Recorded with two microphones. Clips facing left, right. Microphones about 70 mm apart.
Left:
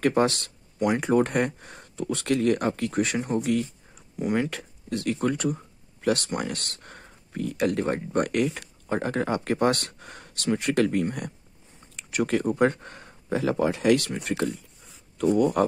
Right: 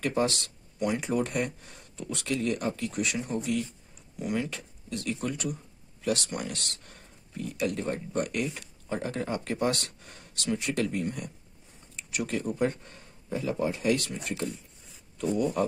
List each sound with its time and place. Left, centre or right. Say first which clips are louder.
0.0 s speech: left 5 dB; left
4.2 s speech: left 5 dB; left
4.5 s speech: left 5 dB; left